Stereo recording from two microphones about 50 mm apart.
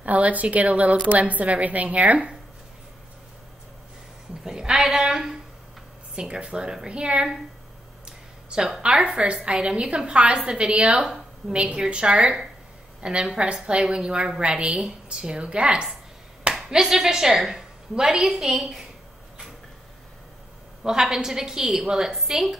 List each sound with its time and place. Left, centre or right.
0.0 s a woman's voice: right
4.5 s a woman's voice: centre
8.5 s a woman's voice: centre
16.7 s a woman's voice: centre
20.8 s a woman's voice: centre